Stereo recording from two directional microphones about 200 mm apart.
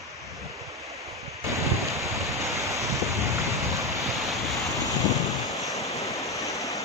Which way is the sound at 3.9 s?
Centre (ahead or behind).